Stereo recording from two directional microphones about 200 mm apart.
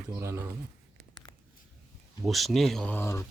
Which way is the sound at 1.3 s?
10° left (ahead or behind).